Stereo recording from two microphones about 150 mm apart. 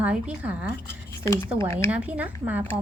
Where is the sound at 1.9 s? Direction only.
10° right (ahead or behind).